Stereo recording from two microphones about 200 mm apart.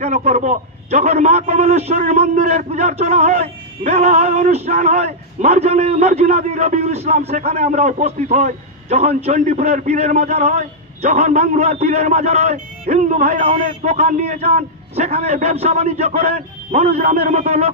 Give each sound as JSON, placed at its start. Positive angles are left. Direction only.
{"t": 0.0, "sound": "a man's voice", "side_deg": -35}